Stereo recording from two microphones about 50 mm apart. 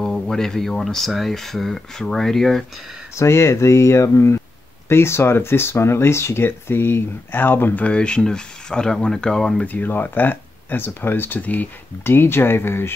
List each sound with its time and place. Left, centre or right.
0.0 s speech: centre
3.2 s speech: left
4.8 s speech: left
6.4 s speech: left
7.8 s speech: left
9.7 s speech: left
12.0 s speech: left